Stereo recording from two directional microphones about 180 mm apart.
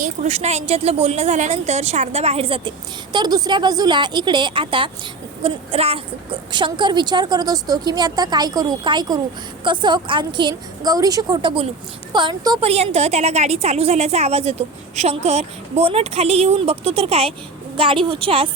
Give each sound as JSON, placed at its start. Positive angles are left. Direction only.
{"t": 0.0, "sound": "a woman's voice", "side_deg": -40}
{"t": 12.6, "sound": "a woman's voice", "side_deg": -35}